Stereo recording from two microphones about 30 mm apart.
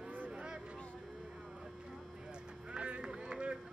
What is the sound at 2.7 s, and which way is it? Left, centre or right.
Run, right.